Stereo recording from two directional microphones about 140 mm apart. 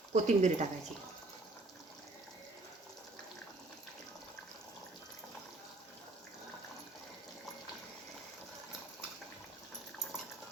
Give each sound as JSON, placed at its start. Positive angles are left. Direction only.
{"t": 0.1, "sound": "speech", "side_deg": -55}